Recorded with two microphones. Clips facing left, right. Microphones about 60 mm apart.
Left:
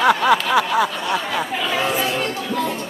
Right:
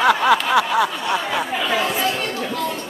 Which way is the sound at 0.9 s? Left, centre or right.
Centre.